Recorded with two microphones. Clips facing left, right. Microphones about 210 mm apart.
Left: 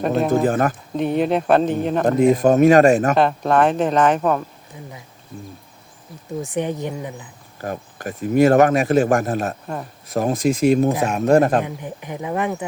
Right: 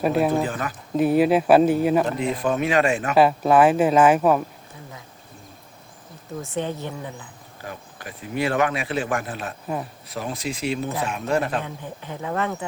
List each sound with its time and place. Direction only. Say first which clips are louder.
0.0 s speech: left 1 dB; 5° right (ahead or behind)
0.3 s speech: left 6 dB; 50° left (ahead or behind)
0.9 s speech: right 3 dB; 5° right (ahead or behind)
2.0 s speech: left 9 dB; 45° left (ahead or behind)
3.2 s speech: right 1 dB; 5° right (ahead or behind)
6.4 s speech: left 4 dB; 15° left (ahead or behind)
7.6 s speech: left 9 dB; 45° left (ahead or behind)
11.6 s speech: left 4 dB; 15° left (ahead or behind)